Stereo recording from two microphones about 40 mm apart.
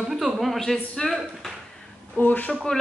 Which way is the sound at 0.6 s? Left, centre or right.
Centre.